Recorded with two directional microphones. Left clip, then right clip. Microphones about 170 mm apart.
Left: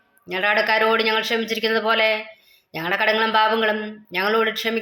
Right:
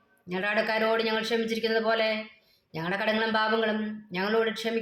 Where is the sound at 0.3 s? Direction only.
20° left (ahead or behind).